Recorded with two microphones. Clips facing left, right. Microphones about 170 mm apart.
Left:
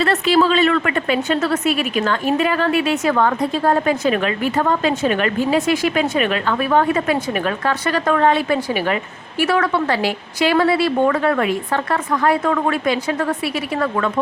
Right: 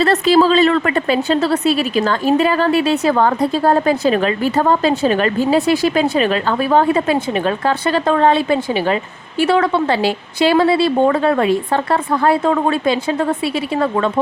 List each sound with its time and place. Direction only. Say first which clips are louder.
0.0 s a woman's voice: right 3 dB; 35° right (ahead or behind)